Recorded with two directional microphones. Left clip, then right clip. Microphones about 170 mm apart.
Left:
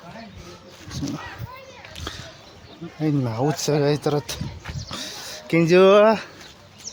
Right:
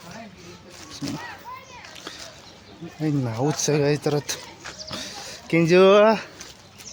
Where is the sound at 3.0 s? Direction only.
5° left (ahead or behind).